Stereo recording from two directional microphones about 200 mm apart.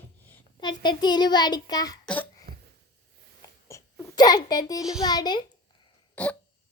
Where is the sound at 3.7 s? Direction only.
15° left (ahead or behind).